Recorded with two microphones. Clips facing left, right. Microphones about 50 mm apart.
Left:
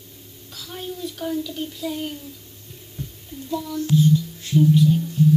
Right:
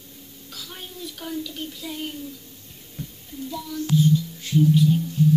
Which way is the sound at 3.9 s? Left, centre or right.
Centre.